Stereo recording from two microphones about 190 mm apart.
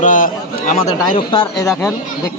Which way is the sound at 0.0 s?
40° left (ahead or behind).